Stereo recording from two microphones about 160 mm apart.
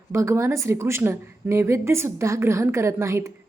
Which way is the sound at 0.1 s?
20° right (ahead or behind).